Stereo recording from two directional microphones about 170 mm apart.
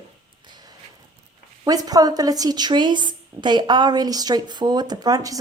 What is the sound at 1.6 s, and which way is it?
A woman's voice, 20° right (ahead or behind).